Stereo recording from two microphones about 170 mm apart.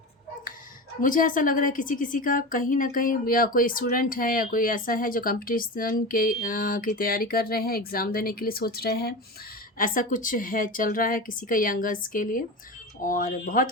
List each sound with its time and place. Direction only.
1.0 s a woman's voice: 50° left (ahead or behind)
9.7 s a woman's voice: 55° left (ahead or behind)